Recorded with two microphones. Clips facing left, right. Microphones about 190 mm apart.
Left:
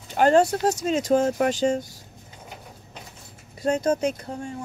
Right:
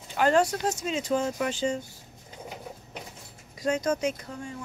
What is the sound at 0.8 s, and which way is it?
Speech, 45° left (ahead or behind).